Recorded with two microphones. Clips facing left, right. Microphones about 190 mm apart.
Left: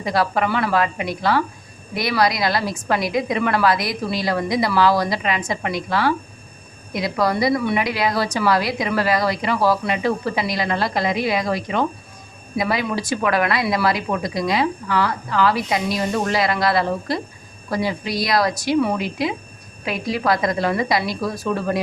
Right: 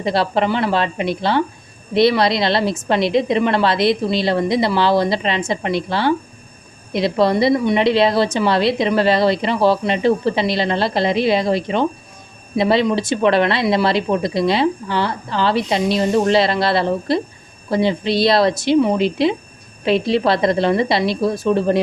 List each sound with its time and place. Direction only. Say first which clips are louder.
0.0 s a woman's voice: right 3 dB; 25° right (ahead or behind)